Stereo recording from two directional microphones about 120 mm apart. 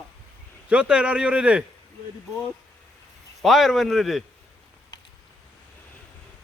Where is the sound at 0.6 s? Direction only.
10° right (ahead or behind).